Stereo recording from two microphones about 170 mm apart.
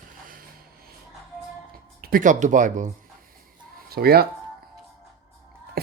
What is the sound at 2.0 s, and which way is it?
Speech, 60° right (ahead or behind).